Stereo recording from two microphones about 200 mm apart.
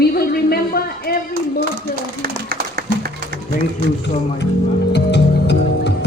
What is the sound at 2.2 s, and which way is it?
Music, 50° right (ahead or behind).